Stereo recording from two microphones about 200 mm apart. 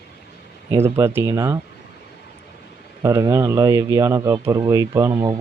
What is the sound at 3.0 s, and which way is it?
Speech, 15° right (ahead or behind).